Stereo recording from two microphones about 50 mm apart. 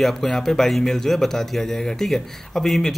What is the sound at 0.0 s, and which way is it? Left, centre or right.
A man's voice, centre.